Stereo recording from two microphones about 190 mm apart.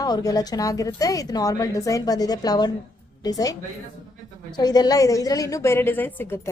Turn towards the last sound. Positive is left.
turn(degrees=10)  # may be behind; listen again after turning